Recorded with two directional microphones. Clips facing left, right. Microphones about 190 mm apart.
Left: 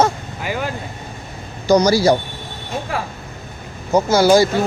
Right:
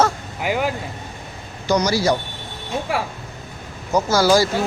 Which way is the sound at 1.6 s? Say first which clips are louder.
Left 5 dB; 40° left (ahead or behind).